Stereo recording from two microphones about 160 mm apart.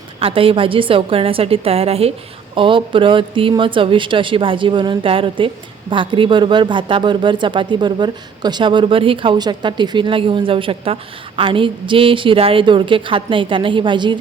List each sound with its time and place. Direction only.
0.2 s speech: 35° right (ahead or behind)